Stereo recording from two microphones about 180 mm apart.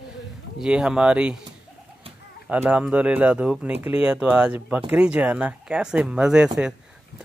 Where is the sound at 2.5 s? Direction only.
5° right (ahead or behind).